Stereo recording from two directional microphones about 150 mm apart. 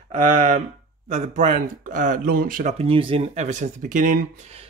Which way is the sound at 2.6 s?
40° right (ahead or behind).